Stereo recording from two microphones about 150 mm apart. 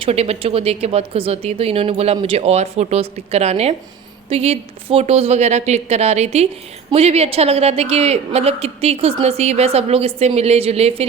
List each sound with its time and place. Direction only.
0.0 s a woman's voice: 45° right (ahead or behind)